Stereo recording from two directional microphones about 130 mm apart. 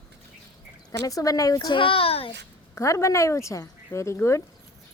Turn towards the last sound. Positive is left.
turn(degrees=20)  # may be behind; listen again after turning